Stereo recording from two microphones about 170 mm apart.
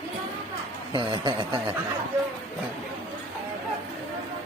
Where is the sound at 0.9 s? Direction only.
30° right (ahead or behind).